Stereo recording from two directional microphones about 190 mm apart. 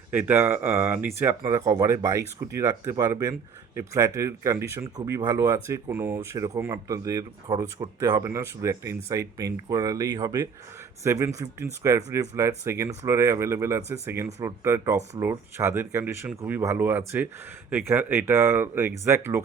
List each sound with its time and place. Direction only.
0.1 s speech: 10° right (ahead or behind)